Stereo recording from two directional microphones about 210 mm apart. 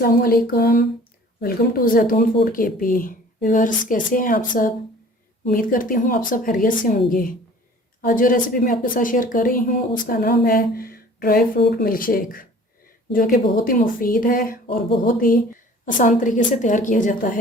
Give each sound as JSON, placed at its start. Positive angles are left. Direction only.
{"t": 0.0, "sound": "a woman's voice", "side_deg": 45}